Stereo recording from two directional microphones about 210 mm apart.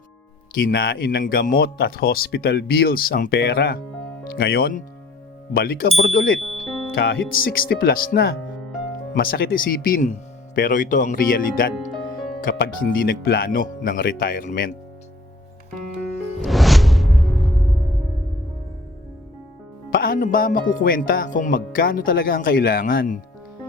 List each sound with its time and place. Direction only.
0.5 s speech: 45° left (ahead or behind)
6.4 s music: centre (ahead or behind)
6.9 s speech: 45° left (ahead or behind)
16.4 s music: centre (ahead or behind)
19.9 s speech: 45° left (ahead or behind)